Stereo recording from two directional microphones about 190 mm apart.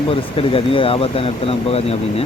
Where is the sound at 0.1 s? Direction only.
30° left (ahead or behind).